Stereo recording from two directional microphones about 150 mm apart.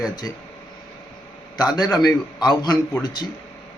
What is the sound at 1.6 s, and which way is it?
Speech, 25° left (ahead or behind).